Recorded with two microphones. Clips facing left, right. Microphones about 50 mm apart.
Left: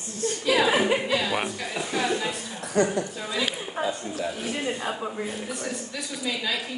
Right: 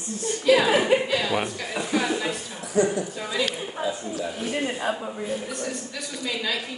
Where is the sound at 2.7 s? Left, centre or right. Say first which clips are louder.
Right 1 dB; left.